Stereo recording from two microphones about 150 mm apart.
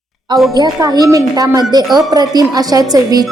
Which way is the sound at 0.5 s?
25° right (ahead or behind).